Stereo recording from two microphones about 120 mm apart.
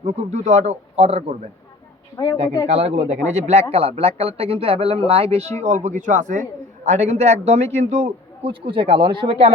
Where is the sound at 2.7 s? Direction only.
65° right (ahead or behind); by 6.4 s 90° right.